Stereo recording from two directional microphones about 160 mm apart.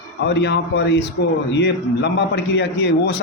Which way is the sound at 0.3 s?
90° left.